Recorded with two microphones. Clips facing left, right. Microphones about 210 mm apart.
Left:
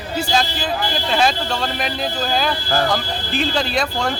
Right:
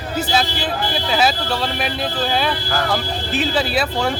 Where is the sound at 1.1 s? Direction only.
5° right (ahead or behind).